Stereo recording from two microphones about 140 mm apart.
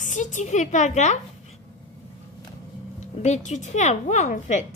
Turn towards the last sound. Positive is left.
turn(degrees=60)  # may be behind; listen again after turning